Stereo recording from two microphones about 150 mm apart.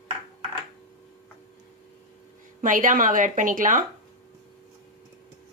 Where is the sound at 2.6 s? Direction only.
60° right (ahead or behind).